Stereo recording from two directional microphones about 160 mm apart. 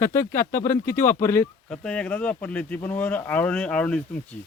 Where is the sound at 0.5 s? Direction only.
55° left (ahead or behind).